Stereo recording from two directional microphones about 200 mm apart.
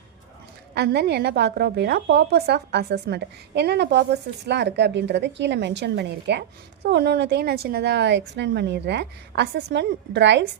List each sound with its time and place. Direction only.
0.7 s a woman's voice: 55° right (ahead or behind)